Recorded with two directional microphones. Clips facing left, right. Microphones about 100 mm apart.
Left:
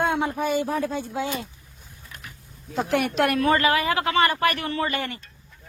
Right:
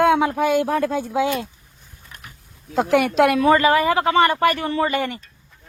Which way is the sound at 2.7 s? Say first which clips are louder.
Right 6 dB; 90° right.